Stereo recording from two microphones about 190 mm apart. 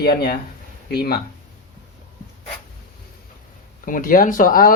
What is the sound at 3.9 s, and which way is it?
Speech, 45° left (ahead or behind).